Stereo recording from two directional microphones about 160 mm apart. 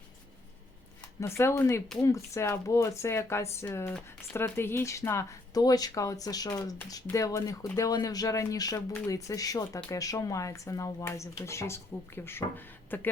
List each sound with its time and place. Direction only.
1.2 s speech: 15° left (ahead or behind)